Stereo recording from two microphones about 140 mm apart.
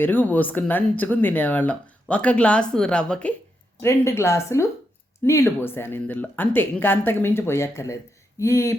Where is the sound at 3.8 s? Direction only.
20° left (ahead or behind).